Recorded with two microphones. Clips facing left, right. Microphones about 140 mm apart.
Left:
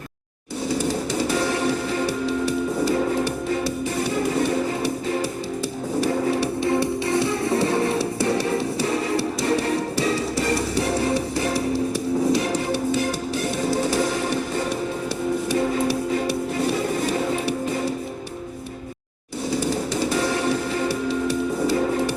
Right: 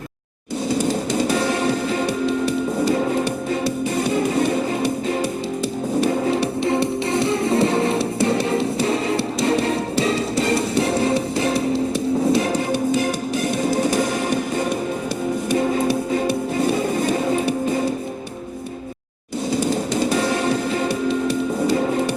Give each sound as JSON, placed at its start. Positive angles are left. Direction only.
{"t": 0.7, "sound": "music", "side_deg": -20}
{"t": 3.9, "sound": "music", "side_deg": -20}
{"t": 6.0, "sound": "music", "side_deg": -20}
{"t": 13.6, "sound": "music", "side_deg": -15}
{"t": 15.9, "sound": "music", "side_deg": -50}
{"t": 16.7, "sound": "music", "side_deg": -20}
{"t": 19.5, "sound": "music", "side_deg": -20}